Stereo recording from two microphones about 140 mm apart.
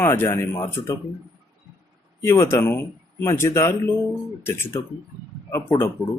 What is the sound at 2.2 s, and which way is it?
Speech, 15° left (ahead or behind).